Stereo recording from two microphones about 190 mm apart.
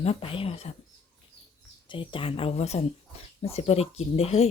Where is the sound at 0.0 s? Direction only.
30° left (ahead or behind).